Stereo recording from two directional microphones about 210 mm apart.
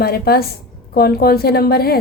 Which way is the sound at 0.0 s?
45° left (ahead or behind).